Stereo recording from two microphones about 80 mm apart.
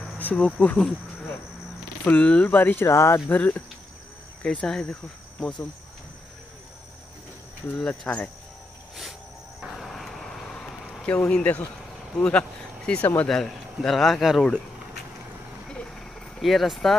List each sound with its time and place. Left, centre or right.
0.2 s speech: centre
2.0 s speech: centre
2.9 s speech: left
3.3 s speech: left
8.1 s speech: centre
9.6 s vehicle: centre
11.1 s speech: centre
13.0 s speech: left
13.3 s speech: centre
15.7 s a sound: centre